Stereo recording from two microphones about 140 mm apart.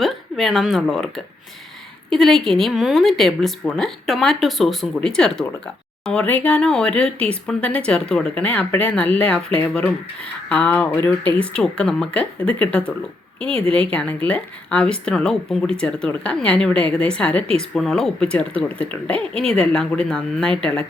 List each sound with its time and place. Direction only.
0.0 s speech: centre (ahead or behind)